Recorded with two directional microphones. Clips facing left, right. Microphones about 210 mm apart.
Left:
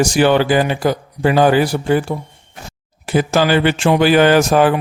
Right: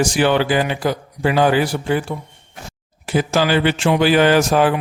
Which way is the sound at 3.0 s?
50° left (ahead or behind).